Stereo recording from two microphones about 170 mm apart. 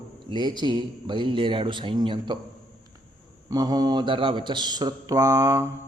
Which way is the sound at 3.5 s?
20° right (ahead or behind).